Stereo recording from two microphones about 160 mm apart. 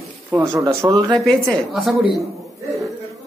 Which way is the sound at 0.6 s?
25° right (ahead or behind).